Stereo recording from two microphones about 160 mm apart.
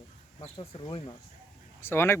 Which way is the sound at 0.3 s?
35° left (ahead or behind).